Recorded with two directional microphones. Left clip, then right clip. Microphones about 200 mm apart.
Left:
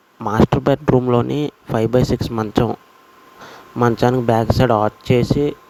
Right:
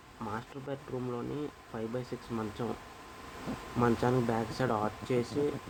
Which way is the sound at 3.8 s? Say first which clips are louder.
Left 13 dB; 45° left (ahead or behind).